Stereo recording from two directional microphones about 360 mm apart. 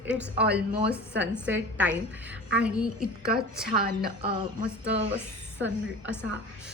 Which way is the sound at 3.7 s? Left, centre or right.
Right.